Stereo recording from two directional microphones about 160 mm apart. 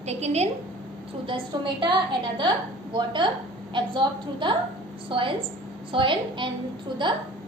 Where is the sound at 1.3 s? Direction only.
30° right (ahead or behind).